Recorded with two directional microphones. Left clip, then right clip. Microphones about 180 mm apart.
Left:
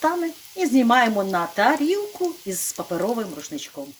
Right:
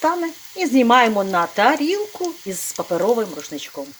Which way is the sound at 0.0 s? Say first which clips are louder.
Right 3 dB; 5° right (ahead or behind).